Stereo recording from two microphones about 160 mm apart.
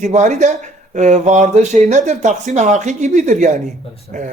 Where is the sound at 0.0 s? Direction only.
50° right (ahead or behind).